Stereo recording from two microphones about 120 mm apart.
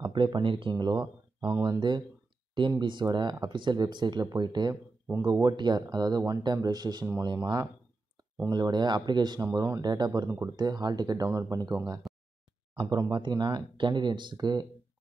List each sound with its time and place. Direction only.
0.0 s speech: 40° right (ahead or behind)
7.1 s speech: 25° right (ahead or behind)